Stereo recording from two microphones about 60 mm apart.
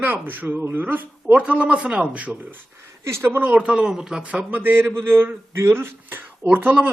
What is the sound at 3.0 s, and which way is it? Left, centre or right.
Speech, right.